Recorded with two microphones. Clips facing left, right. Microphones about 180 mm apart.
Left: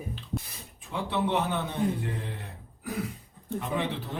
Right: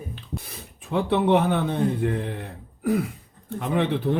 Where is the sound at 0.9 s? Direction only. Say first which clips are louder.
Right 8 dB; 60° right (ahead or behind).